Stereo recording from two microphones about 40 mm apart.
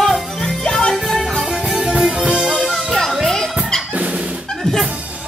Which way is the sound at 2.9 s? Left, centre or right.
Centre.